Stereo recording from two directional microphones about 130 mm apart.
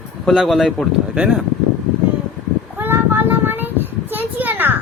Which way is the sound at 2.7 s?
15° right (ahead or behind).